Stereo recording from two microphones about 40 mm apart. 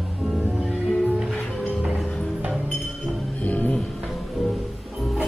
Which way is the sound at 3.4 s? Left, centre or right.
Left.